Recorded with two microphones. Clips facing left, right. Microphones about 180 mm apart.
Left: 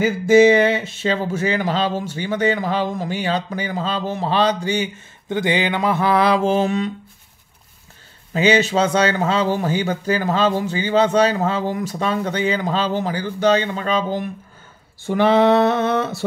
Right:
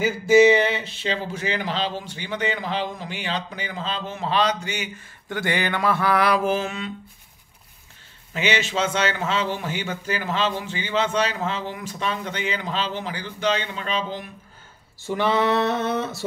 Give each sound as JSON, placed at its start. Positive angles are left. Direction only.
{"t": 0.0, "sound": "speech", "side_deg": 50}
{"t": 5.3, "sound": "mantra", "side_deg": 20}
{"t": 8.3, "sound": "speech", "side_deg": 40}
{"t": 15.0, "sound": "a sound", "side_deg": 55}